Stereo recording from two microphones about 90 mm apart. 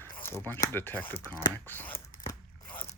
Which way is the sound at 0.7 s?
25° left (ahead or behind).